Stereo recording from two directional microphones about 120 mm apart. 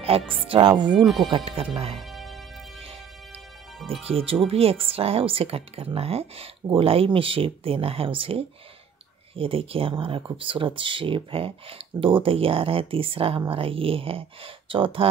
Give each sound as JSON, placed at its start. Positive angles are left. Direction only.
{"t": 0.3, "sound": "speech", "side_deg": -45}
{"t": 1.0, "sound": "speech", "side_deg": 0}
{"t": 1.3, "sound": "speech", "side_deg": -50}
{"t": 2.0, "sound": "music", "side_deg": 0}
{"t": 4.0, "sound": "speech", "side_deg": -55}